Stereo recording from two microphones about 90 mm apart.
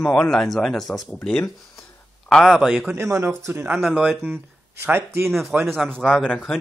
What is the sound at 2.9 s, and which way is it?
Speech, 30° right (ahead or behind).